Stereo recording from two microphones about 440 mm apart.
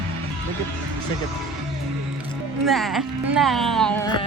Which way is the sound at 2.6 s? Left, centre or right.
Centre.